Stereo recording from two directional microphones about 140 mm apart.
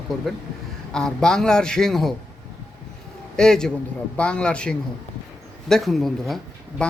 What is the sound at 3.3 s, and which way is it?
A man's voice, 5° left (ahead or behind).